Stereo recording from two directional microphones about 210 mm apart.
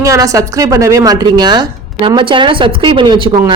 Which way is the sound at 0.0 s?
15° right (ahead or behind).